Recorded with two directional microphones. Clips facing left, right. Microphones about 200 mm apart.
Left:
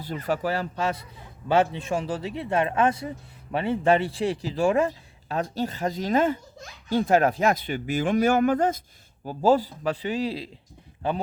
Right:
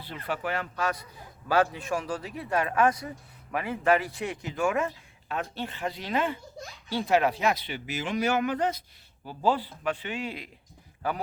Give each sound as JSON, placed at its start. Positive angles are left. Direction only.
{"t": 0.0, "sound": "speech", "side_deg": 45}